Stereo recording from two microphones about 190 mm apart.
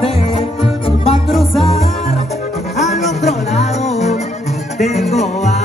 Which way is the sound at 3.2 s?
35° left (ahead or behind).